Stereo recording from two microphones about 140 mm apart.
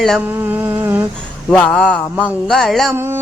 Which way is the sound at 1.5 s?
5° left (ahead or behind).